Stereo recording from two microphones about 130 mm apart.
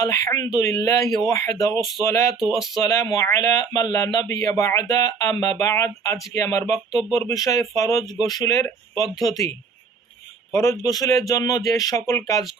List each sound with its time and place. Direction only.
0.0 s speech: 25° left (ahead or behind)
10.5 s speech: 20° left (ahead or behind)